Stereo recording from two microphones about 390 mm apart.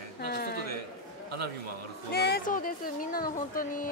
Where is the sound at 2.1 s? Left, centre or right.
Left.